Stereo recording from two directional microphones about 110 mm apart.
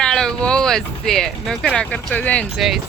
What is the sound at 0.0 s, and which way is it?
Speech, 5° left (ahead or behind).